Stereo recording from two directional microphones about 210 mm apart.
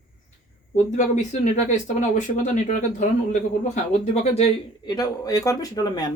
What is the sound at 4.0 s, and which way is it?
Speech, 30° left (ahead or behind).